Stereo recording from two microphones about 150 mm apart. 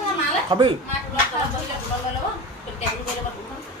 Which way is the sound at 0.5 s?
30° right (ahead or behind).